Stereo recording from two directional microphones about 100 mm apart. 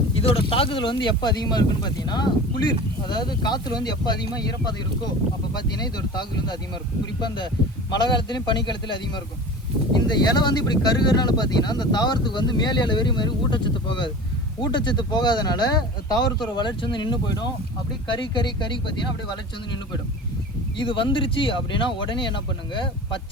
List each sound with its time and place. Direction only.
0.1 s speech: 65° left (ahead or behind); by 4.2 s 45° left (ahead or behind)
6.0 s speech: 45° left (ahead or behind)
20.7 s speech: 55° left (ahead or behind)